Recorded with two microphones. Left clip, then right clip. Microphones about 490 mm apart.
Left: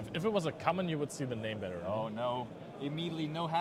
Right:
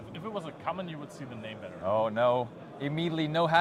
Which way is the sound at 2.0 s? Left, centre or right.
Right.